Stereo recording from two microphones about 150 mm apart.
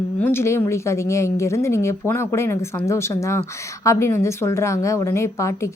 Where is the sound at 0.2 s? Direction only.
15° left (ahead or behind).